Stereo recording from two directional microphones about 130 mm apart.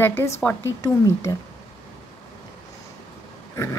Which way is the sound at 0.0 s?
15° left (ahead or behind).